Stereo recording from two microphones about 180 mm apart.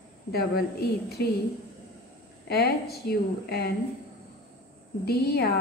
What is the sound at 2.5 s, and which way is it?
A woman's voice, 60° left (ahead or behind).